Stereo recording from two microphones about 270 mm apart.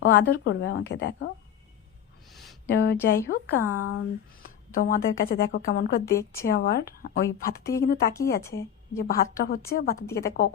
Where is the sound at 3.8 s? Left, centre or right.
Left.